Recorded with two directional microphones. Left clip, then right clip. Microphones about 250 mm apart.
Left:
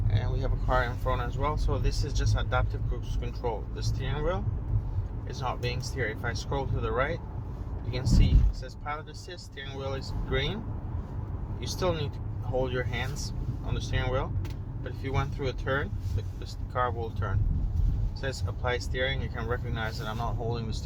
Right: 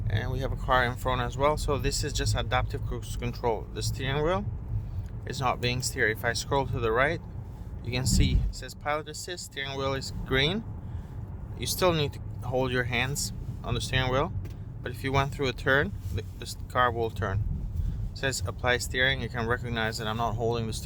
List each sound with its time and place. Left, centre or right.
0.1 s speech: right
11.6 s speech: right